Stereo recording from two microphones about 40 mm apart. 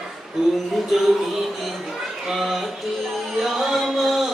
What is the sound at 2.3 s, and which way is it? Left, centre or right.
Music, centre.